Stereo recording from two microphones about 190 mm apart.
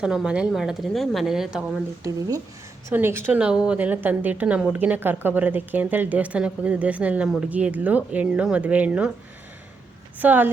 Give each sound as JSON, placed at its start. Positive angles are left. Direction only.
{"t": 0.0, "sound": "a woman's voice", "side_deg": -5}
{"t": 2.0, "sound": "a woman's voice", "side_deg": -20}
{"t": 10.2, "sound": "a woman's voice", "side_deg": -10}